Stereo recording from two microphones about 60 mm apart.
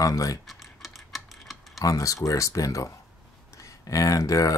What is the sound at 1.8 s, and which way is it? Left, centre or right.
Speech, left.